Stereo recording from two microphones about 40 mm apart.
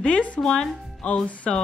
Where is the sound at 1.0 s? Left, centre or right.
Left.